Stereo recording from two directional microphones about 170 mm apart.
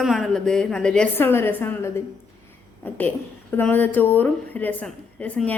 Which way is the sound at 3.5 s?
10° left (ahead or behind).